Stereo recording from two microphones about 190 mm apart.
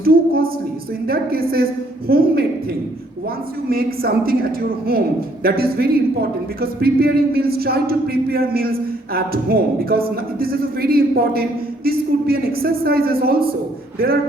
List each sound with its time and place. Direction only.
0.0 s speech: 50° right (ahead or behind)
3.7 s speech: 50° right (ahead or behind)